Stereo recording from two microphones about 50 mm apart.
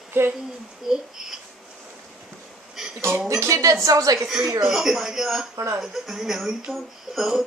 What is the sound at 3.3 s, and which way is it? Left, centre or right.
Speech, right.